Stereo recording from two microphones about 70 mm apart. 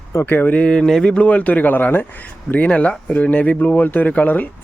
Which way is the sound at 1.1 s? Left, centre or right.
Centre.